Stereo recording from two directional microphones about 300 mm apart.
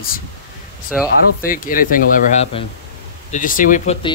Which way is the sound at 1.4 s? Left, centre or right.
Left.